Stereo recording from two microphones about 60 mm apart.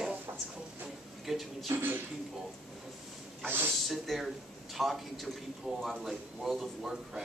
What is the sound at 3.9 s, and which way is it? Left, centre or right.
Speech, centre.